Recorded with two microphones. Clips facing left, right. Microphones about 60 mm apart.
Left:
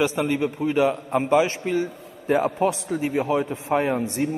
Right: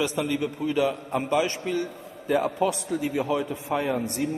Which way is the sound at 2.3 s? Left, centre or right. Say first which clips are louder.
Left 2 dB; left.